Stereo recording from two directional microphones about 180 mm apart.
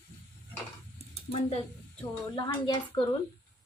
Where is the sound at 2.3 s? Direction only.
25° left (ahead or behind).